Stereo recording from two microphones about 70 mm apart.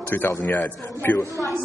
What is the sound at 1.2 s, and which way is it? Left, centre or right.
Speech, left.